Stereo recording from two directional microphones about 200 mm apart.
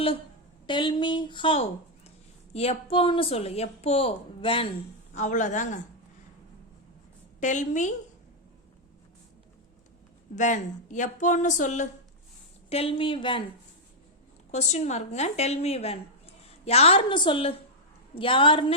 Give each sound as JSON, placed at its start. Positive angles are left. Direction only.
{"t": 0.7, "sound": "a woman's voice", "side_deg": 25}
{"t": 5.1, "sound": "a woman's voice", "side_deg": 40}
{"t": 7.3, "sound": "a woman's voice", "side_deg": 35}
{"t": 10.3, "sound": "a woman's voice", "side_deg": 40}
{"t": 12.7, "sound": "a woman's voice", "side_deg": 30}
{"t": 14.5, "sound": "a woman's voice", "side_deg": 35}